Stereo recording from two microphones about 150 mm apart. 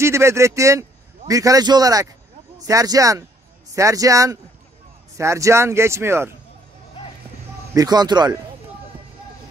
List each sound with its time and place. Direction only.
0.0 s a man's voice: 20° right (ahead or behind)
7.7 s speech: 25° right (ahead or behind)